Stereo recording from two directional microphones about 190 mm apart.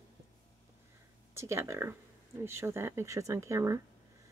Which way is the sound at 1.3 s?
15° right (ahead or behind).